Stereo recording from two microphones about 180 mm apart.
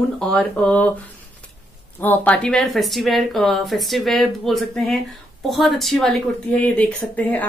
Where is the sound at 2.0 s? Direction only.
10° left (ahead or behind).